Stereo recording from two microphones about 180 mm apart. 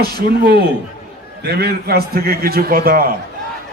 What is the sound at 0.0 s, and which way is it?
A man's voice, 60° right (ahead or behind).